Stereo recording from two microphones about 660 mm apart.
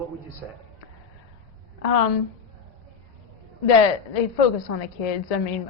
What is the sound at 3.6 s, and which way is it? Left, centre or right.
A woman's voice, left.